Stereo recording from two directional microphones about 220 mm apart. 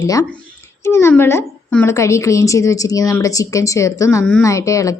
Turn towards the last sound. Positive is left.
turn(degrees=15)  # may be behind; listen again after turning